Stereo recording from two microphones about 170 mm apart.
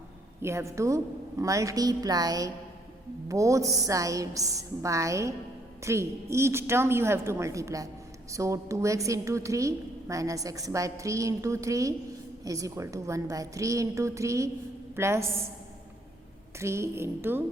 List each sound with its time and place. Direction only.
0.4 s a woman's voice: 15° right (ahead or behind)
16.6 s a woman's voice: 15° right (ahead or behind)